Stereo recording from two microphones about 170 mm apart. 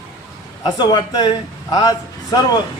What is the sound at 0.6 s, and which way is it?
A man's voice, 25° left (ahead or behind).